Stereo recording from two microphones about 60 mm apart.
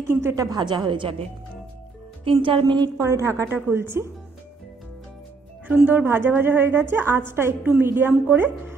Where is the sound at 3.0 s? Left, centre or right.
Right.